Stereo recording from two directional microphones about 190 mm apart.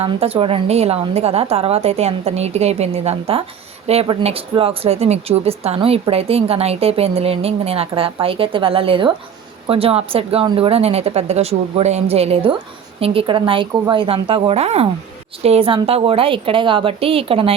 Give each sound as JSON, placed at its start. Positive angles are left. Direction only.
{"t": 0.0, "sound": "a woman's voice", "side_deg": -30}